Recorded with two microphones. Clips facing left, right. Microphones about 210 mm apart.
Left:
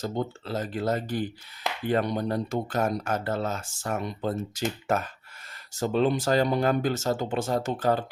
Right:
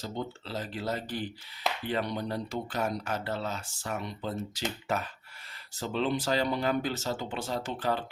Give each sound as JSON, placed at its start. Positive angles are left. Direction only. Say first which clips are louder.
{"t": 0.0, "sound": "speech", "louder": "left 6 dB", "side_deg": 50}